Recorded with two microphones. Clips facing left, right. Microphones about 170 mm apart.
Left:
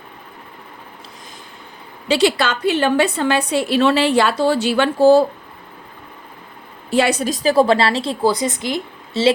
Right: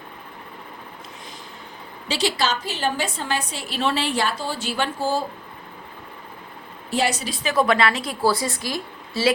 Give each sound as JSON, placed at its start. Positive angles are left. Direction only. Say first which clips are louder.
{"t": 2.0, "sound": "a woman's voice", "louder": "left 7 dB", "side_deg": 60}
{"t": 6.9, "sound": "a woman's voice", "louder": "left 6 dB", "side_deg": 60}
{"t": 7.3, "sound": "a woman's voice", "louder": "left 7 dB", "side_deg": 35}